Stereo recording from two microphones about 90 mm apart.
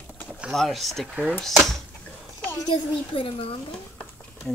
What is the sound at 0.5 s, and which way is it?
Speech, centre (ahead or behind).